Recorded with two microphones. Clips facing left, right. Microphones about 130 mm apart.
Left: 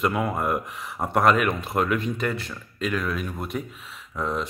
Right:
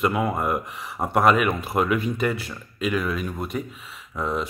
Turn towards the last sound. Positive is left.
turn(degrees=-5)  # may be behind; listen again after turning